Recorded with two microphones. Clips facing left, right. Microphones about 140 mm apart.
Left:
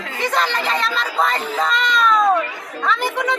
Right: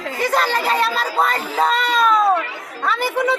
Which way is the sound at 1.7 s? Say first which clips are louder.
Left 1 dB; 35° right (ahead or behind).